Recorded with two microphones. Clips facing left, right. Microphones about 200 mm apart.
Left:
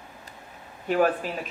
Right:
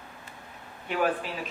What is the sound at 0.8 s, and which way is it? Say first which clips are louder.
Speech: left 5 dB; 45° left (ahead or behind).